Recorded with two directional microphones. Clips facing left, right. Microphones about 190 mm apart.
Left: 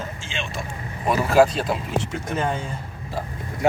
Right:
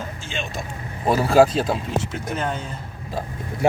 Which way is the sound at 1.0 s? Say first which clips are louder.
Right 2 dB; 30° right (ahead or behind).